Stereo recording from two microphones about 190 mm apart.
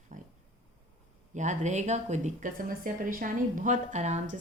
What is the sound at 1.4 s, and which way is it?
A woman's voice, 40° right (ahead or behind).